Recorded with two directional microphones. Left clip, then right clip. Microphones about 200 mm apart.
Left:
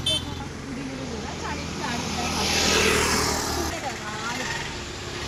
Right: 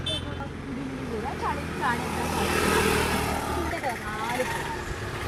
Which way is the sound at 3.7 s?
55° right (ahead or behind).